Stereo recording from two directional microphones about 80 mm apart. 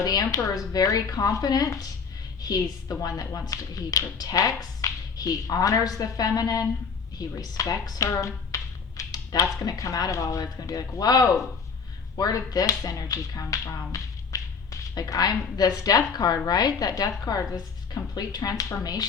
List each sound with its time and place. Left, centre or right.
0.0 s speech: left